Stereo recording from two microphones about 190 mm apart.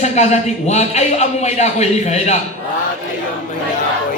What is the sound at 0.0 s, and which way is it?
A man's voice, 35° left (ahead or behind).